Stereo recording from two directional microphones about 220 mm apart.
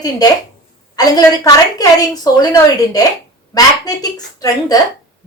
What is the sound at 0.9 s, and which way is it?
A woman's voice, 20° left (ahead or behind).